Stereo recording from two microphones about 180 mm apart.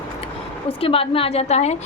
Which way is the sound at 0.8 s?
30° left (ahead or behind).